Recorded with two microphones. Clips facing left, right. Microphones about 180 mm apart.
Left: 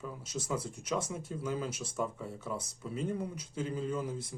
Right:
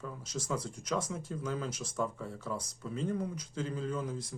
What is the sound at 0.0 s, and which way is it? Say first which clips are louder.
Speech: even; 5° left (ahead or behind).